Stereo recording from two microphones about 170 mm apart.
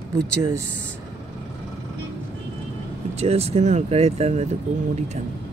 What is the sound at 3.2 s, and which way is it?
Speech, 35° right (ahead or behind).